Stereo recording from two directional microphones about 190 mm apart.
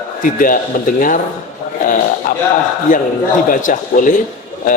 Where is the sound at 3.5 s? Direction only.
45° left (ahead or behind).